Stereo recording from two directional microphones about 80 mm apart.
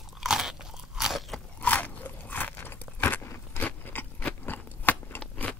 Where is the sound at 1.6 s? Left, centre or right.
Left.